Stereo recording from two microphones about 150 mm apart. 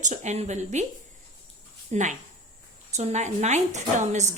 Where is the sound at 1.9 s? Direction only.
55° right (ahead or behind).